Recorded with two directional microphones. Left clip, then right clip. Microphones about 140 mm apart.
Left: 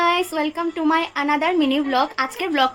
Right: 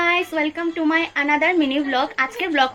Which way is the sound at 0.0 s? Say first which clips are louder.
Even; 30° left (ahead or behind).